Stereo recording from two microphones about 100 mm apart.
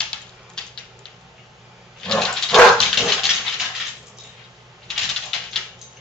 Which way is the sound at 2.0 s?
5° left (ahead or behind).